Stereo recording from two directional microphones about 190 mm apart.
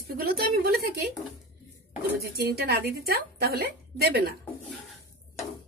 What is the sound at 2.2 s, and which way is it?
Speech, 55° right (ahead or behind).